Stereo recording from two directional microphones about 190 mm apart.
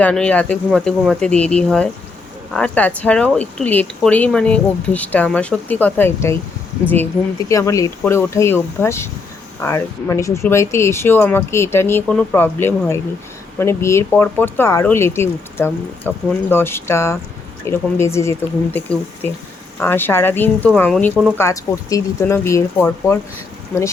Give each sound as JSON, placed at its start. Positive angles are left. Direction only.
{"t": 0.0, "sound": "speech", "side_deg": 5}